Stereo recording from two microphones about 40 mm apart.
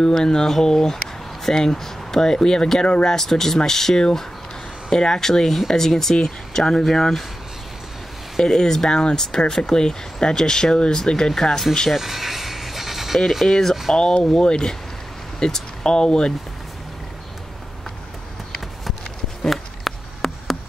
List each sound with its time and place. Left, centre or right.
0.0 s speech: centre
3.2 s speech: centre
8.4 s speech: centre
11.9 s music: centre
13.5 s speech: centre
19.4 s a sound: centre